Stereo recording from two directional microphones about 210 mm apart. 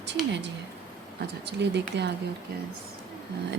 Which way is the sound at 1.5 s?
55° right (ahead or behind).